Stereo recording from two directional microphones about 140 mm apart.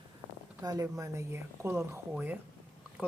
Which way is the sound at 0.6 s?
25° right (ahead or behind).